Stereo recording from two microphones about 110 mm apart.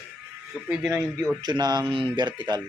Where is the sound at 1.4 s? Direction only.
40° right (ahead or behind).